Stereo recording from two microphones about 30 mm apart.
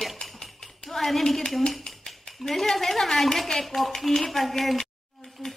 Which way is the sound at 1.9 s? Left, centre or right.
Left.